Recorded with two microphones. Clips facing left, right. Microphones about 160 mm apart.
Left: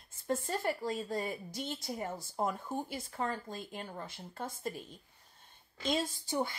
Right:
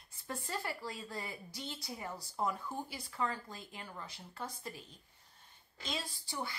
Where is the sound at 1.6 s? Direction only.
50° left (ahead or behind).